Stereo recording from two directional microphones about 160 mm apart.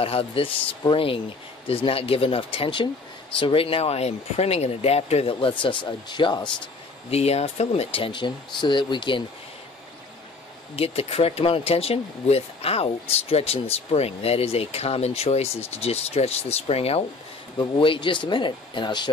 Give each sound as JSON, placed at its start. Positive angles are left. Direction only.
{"t": 0.0, "sound": "speech", "side_deg": 35}
{"t": 7.1, "sound": "speech", "side_deg": 40}
{"t": 10.8, "sound": "speech", "side_deg": 40}